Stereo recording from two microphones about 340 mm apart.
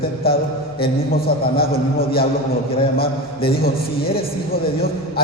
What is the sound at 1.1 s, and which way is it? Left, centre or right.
A man's voice, left.